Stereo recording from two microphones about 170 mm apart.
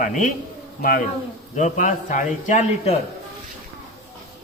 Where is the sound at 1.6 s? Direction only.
45° left (ahead or behind).